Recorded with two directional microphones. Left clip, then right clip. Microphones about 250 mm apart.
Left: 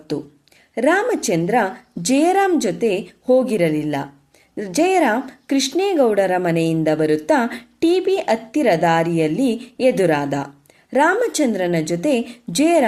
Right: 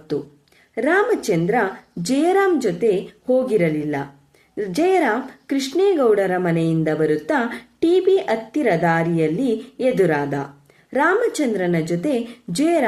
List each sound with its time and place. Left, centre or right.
0.1 s speech: left